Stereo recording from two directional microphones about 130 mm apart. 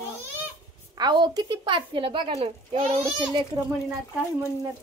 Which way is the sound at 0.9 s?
35° right (ahead or behind).